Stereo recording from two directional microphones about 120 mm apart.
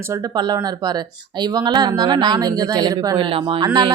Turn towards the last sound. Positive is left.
turn(degrees=-40)  # may be behind; listen again after turning